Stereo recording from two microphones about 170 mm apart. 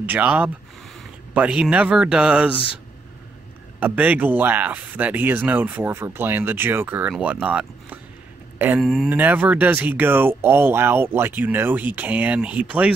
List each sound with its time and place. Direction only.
0.0 s speech: 10° right (ahead or behind)
3.8 s speech: 10° right (ahead or behind)
8.8 s speech: centre (ahead or behind)